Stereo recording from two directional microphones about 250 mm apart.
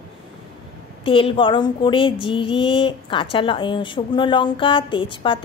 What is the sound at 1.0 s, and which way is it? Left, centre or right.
Speech, left.